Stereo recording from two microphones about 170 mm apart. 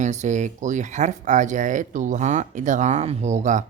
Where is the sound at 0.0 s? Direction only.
45° right (ahead or behind).